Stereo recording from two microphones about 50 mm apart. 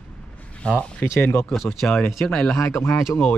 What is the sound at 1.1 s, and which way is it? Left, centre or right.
Speech, left.